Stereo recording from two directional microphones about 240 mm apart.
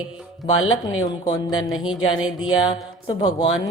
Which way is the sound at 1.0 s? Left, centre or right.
Centre.